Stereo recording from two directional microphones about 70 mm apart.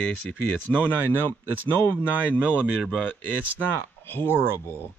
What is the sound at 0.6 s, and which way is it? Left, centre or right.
Speech, left.